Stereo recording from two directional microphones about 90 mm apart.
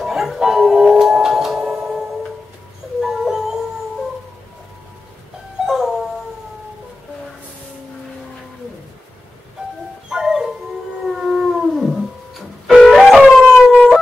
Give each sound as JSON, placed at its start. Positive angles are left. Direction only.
{"t": 0.0, "sound": "music", "side_deg": -5}
{"t": 3.0, "sound": "dog", "side_deg": -5}
{"t": 5.7, "sound": "music", "side_deg": 0}
{"t": 10.0, "sound": "music", "side_deg": -5}